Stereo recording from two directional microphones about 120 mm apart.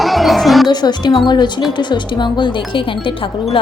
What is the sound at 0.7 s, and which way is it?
Speech, 35° left (ahead or behind).